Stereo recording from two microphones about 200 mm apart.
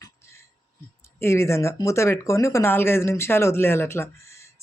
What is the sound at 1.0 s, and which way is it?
Speech, 15° left (ahead or behind).